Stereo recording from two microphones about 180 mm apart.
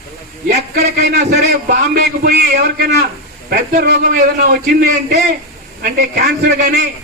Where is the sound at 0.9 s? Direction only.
60° right (ahead or behind).